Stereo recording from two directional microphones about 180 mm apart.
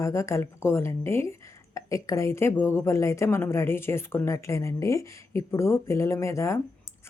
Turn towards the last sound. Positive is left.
turn(degrees=15)  # may be behind; listen again after turning